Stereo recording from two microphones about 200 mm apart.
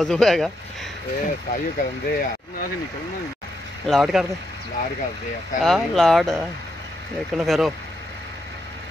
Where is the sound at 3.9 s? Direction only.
Centre (ahead or behind).